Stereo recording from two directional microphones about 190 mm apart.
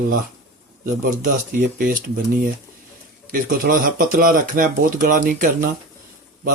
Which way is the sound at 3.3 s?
50° right (ahead or behind).